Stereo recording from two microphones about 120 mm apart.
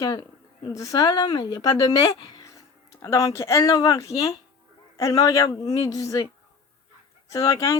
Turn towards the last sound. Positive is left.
turn(degrees=25)  # may be behind; listen again after turning